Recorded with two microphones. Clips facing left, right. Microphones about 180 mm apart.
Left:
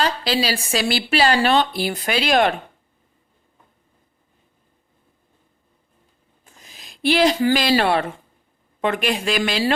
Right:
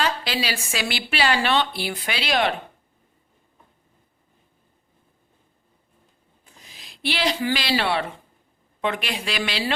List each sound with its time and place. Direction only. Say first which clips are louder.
0.0 s a woman's voice: left 4 dB; 35° left (ahead or behind)
6.4 s a sound: left 2 dB; 45° left (ahead or behind)
8.8 s speech: left 5 dB; 50° left (ahead or behind)